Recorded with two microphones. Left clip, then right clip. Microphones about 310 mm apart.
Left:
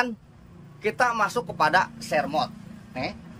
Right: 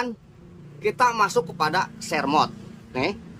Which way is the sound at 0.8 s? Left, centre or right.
Centre.